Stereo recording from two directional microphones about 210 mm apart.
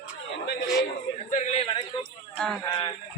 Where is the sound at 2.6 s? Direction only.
25° left (ahead or behind).